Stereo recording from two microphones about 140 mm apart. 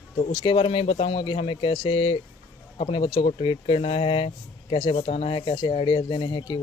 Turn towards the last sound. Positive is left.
turn(degrees=35)  # may be behind; listen again after turning